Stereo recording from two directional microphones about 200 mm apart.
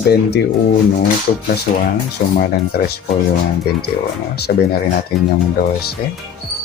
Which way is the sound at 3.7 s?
55° left (ahead or behind).